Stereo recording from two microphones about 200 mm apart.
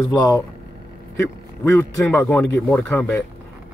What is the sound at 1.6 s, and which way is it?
Speech, 10° left (ahead or behind).